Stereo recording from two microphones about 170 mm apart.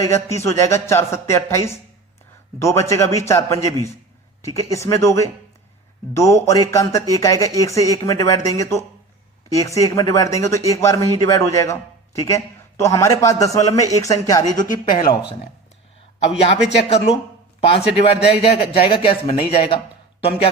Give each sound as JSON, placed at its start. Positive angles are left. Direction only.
{"t": 0.1, "sound": "speech", "side_deg": 15}
{"t": 16.7, "sound": "speech", "side_deg": 40}